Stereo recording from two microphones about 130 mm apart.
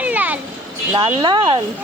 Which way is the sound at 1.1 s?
35° right (ahead or behind).